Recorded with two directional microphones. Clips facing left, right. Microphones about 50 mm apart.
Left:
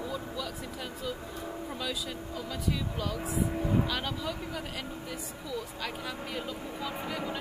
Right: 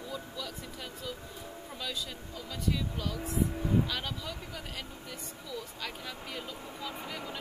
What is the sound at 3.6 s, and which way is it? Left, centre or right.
Speech, left.